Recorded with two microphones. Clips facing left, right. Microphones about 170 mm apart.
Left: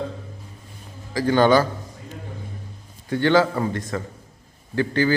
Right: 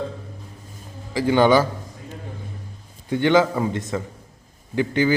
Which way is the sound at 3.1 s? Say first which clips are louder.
Right 1 dB; 15° right (ahead or behind).